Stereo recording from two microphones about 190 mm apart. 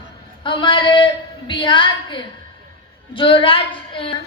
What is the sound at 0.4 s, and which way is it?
Child singing, 25° left (ahead or behind).